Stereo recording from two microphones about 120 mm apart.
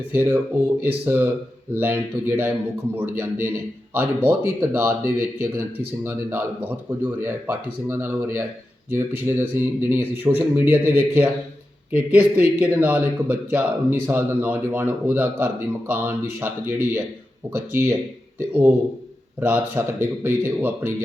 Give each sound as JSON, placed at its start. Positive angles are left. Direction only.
{"t": 0.1, "sound": "a man's voice", "side_deg": -15}